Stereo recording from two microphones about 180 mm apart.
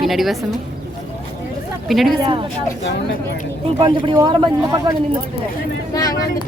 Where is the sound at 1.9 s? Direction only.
Centre (ahead or behind).